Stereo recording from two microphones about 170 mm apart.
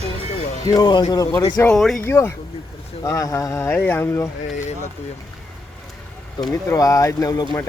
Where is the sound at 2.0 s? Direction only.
15° left (ahead or behind).